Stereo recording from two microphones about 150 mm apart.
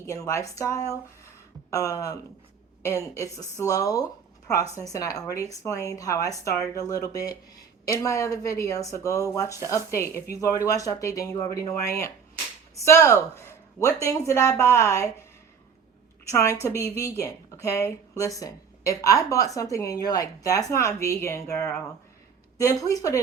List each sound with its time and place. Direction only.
0.0 s speech: 20° left (ahead or behind)
16.3 s speech: 20° left (ahead or behind)